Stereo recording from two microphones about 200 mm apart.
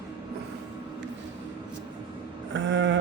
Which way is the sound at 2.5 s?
65° right (ahead or behind).